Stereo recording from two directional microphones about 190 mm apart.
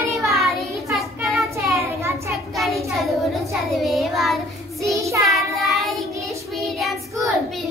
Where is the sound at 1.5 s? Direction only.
15° right (ahead or behind).